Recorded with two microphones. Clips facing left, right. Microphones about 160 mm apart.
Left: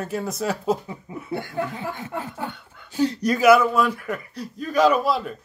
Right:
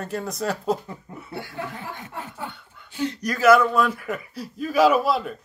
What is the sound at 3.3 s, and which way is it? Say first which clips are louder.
Speech: even; 10° left (ahead or behind).